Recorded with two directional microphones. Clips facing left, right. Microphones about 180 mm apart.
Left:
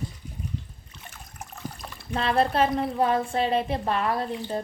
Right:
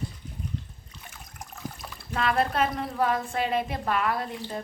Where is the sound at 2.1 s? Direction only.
30° left (ahead or behind).